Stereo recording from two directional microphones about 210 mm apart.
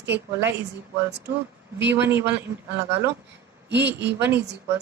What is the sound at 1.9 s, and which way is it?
Speech, 10° right (ahead or behind).